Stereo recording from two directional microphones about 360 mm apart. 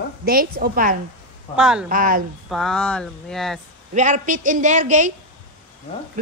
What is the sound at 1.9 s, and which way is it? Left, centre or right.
Speech, right.